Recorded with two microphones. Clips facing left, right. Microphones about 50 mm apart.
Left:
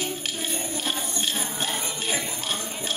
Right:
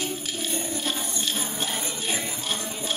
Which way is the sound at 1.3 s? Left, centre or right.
Centre.